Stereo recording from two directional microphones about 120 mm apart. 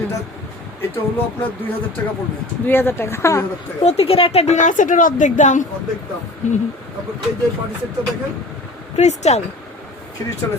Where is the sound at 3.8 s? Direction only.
60° left (ahead or behind); by 5.6 s 90° left.